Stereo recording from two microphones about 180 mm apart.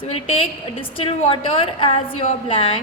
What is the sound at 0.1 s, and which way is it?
A woman's voice, 30° left (ahead or behind).